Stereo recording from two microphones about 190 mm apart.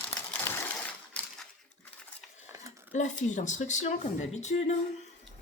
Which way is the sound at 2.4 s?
15° right (ahead or behind).